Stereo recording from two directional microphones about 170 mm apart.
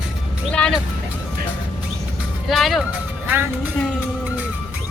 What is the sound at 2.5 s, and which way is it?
Speech, centre (ahead or behind).